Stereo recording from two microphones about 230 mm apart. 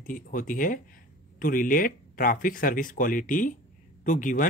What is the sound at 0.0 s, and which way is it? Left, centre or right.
Speech, left.